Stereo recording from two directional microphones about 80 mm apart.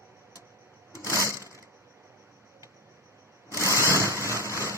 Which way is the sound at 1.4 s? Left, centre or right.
Right.